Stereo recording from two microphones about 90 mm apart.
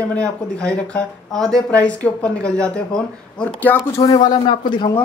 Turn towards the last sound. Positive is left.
turn(degrees=65)  # may be behind; listen again after turning